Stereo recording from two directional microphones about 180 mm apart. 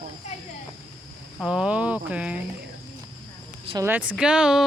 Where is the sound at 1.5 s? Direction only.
5° right (ahead or behind).